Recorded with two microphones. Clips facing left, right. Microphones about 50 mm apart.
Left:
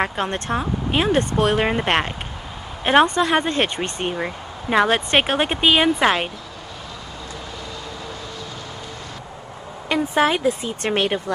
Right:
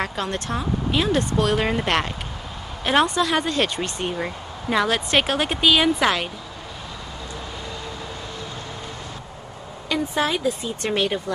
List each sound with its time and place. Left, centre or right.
0.0 s speech: left
10.1 s speech: left